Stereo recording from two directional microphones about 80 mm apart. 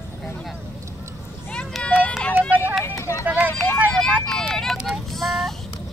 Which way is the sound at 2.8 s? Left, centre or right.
Left.